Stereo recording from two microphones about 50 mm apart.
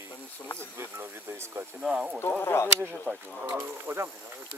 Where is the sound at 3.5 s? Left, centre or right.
Right.